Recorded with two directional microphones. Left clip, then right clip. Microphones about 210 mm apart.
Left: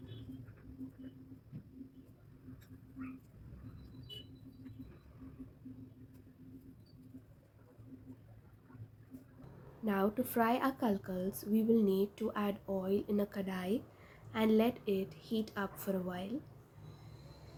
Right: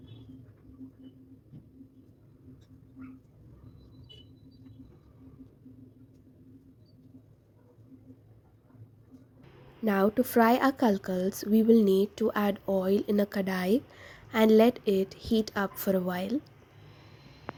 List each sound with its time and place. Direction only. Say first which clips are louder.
9.8 s a woman's voice: right 9 dB; 40° right (ahead or behind)